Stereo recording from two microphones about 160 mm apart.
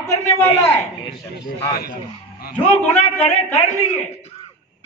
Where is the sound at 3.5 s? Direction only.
45° left (ahead or behind).